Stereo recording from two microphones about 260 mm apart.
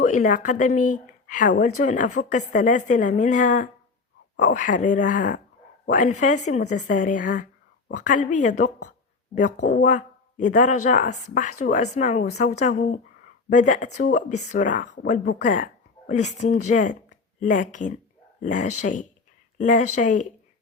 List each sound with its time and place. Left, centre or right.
0.0 s a woman's voice: left